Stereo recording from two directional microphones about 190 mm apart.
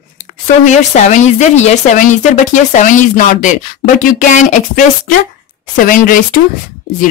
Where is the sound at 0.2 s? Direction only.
40° left (ahead or behind).